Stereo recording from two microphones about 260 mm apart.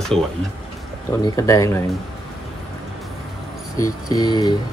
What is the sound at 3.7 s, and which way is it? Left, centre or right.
Speech, centre.